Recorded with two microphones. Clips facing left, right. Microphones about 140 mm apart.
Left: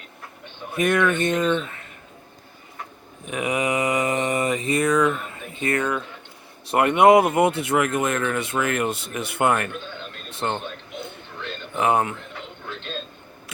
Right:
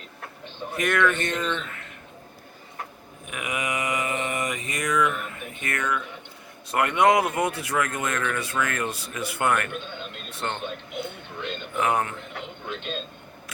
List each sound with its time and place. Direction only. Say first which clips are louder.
0.8 s speech: left 3 dB; 25° left (ahead or behind)
3.2 s mantra: left 7 dB; 35° left (ahead or behind)
6.7 s speech: left 5 dB; 25° left (ahead or behind)
11.7 s speech: left 4 dB; 25° left (ahead or behind)
12.4 s a sound: right 1 dB; 20° right (ahead or behind)